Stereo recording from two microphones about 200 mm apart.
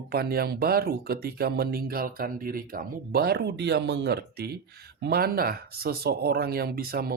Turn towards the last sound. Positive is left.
turn(degrees=-50)  # may be behind; listen again after turning